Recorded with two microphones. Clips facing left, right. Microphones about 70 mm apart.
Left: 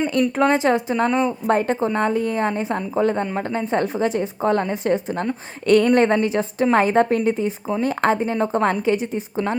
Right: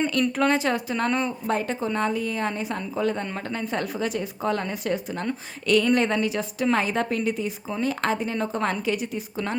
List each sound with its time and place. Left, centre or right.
0.1 s a woman's voice: left
1.5 s a woman's voice: left